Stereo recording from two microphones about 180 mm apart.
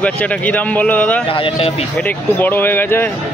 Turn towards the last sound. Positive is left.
turn(degrees=10)  # may be behind; listen again after turning